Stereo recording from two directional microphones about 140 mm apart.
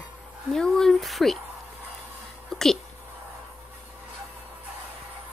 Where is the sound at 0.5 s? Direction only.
5° left (ahead or behind).